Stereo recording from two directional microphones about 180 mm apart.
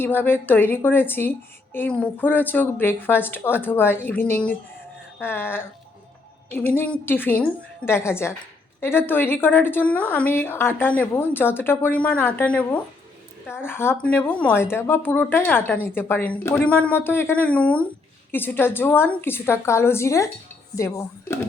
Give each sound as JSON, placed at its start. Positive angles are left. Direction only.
{"t": 0.0, "sound": "speech", "side_deg": 10}